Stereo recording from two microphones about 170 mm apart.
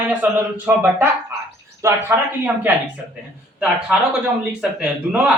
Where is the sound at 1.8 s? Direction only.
15° right (ahead or behind).